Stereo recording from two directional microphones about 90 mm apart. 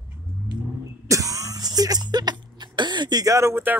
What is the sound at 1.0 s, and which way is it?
Throat clearing, 40° right (ahead or behind).